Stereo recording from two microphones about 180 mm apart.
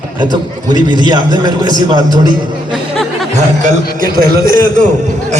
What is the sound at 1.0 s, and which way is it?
Music, 25° right (ahead or behind).